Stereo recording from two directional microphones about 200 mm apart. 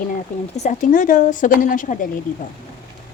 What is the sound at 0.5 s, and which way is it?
Speech, 35° left (ahead or behind).